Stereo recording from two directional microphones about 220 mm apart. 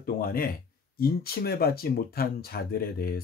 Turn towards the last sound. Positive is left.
turn(degrees=45)  # may be behind; listen again after turning